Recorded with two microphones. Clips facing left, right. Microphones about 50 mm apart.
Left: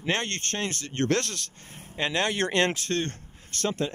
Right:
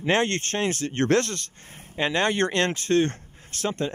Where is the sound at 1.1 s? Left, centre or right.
Centre.